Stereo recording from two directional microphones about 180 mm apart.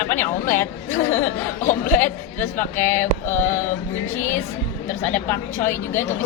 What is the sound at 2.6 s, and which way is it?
Speech, 10° left (ahead or behind).